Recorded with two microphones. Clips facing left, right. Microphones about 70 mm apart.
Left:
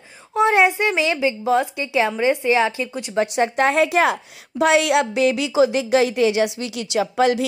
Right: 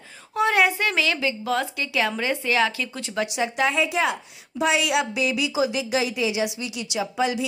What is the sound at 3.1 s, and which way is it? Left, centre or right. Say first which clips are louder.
A woman's voice: left 6 dB; left.